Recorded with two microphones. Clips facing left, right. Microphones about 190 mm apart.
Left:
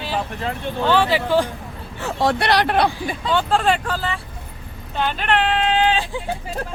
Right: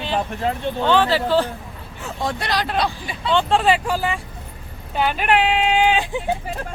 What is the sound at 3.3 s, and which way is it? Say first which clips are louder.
Speech: right 2 dB; centre (ahead or behind).